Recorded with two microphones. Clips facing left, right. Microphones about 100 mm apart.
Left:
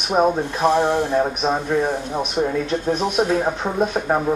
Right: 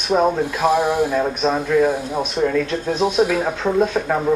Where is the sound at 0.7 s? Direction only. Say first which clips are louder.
Even; 10° right (ahead or behind).